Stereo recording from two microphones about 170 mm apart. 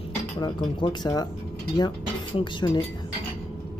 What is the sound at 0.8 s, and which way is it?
Speech, 25° left (ahead or behind).